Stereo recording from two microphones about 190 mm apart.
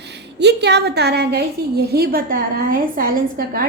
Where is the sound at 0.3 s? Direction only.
60° right (ahead or behind).